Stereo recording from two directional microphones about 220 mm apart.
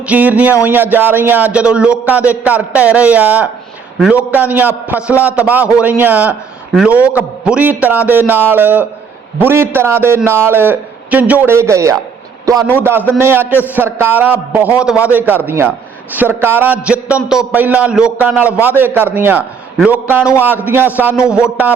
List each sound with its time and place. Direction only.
0.0 s speech: 5° right (ahead or behind)